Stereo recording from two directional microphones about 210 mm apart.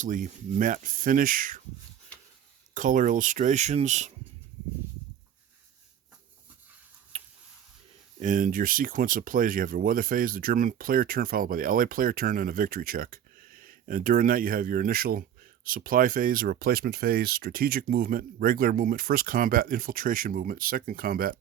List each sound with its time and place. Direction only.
0.0 s speech: 40° right (ahead or behind)
2.7 s speech: 40° right (ahead or behind)
7.1 s tick-tock: 25° right (ahead or behind)
8.2 s speech: 40° right (ahead or behind)